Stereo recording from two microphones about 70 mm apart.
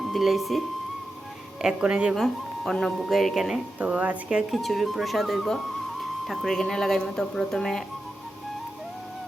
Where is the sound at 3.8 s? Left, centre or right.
Centre.